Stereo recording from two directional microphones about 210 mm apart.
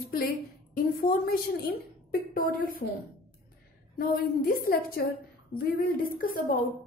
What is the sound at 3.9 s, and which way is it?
A woman's voice, 45° left (ahead or behind).